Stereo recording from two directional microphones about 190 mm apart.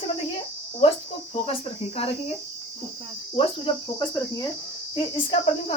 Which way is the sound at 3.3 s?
25° left (ahead or behind).